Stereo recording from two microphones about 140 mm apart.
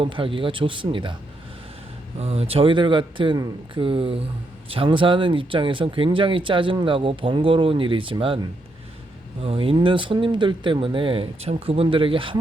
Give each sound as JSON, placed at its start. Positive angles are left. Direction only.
{"t": 0.0, "sound": "speech", "side_deg": -40}
{"t": 2.1, "sound": "speech", "side_deg": -45}